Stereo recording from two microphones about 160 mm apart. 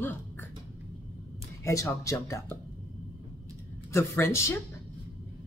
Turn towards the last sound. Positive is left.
turn(degrees=15)  # may be behind; listen again after turning